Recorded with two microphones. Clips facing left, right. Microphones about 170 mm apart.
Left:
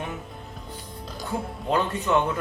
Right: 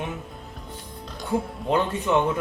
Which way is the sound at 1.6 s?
20° right (ahead or behind).